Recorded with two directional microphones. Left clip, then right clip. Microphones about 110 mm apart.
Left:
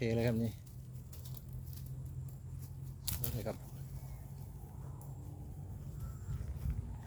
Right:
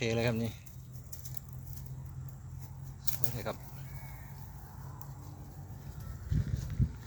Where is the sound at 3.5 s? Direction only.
30° left (ahead or behind).